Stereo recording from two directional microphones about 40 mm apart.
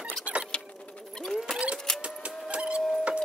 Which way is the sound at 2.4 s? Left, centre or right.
Right.